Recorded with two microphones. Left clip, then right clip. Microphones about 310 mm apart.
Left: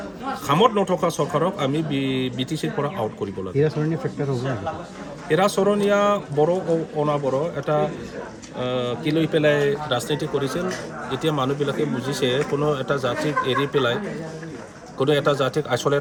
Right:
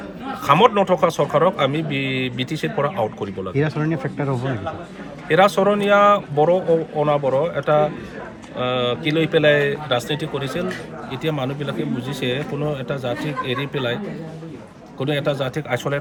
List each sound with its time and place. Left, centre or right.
0.4 s a man's voice: centre
3.5 s speech: centre
5.3 s a man's voice: centre
14.9 s a man's voice: centre